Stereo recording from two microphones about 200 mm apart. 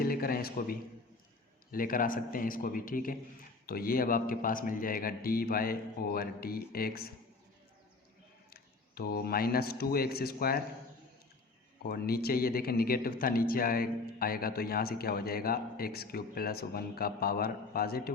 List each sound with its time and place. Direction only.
0.0 s speech: 45° left (ahead or behind)
8.4 s speech: 50° left (ahead or behind)
11.9 s speech: 50° left (ahead or behind)